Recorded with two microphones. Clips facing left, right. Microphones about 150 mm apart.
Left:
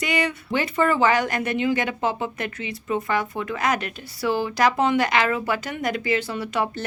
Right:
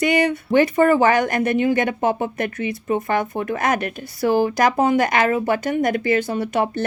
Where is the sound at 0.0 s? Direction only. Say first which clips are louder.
Right 7 dB; 50° right (ahead or behind).